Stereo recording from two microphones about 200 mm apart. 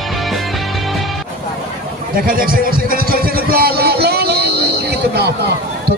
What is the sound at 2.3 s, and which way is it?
Music, 45° right (ahead or behind).